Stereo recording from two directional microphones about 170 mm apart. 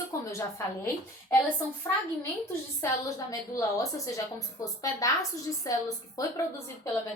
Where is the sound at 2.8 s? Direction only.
20° left (ahead or behind).